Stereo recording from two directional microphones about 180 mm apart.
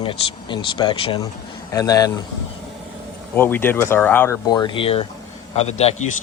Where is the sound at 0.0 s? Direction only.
25° left (ahead or behind).